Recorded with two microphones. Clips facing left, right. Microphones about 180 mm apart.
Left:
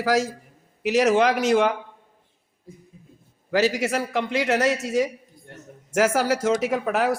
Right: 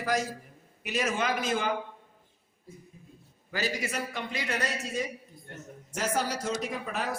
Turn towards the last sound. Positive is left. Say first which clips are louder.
# left 11 dB
turn(degrees=80)